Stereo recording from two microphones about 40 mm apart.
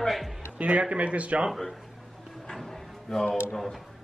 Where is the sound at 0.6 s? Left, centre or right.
Right.